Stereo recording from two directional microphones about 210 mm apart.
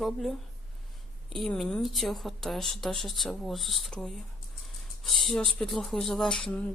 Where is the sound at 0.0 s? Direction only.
Centre (ahead or behind).